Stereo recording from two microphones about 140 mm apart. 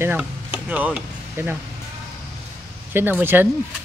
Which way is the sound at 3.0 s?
15° right (ahead or behind).